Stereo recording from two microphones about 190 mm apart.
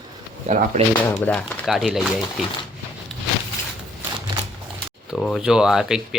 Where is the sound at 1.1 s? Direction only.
5° left (ahead or behind).